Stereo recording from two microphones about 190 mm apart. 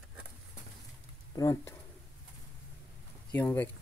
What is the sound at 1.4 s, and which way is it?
Speech, 20° left (ahead or behind).